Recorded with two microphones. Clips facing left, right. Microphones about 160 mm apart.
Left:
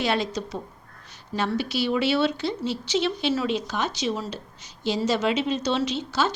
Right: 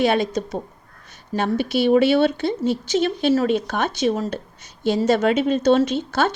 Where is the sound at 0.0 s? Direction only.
55° right (ahead or behind).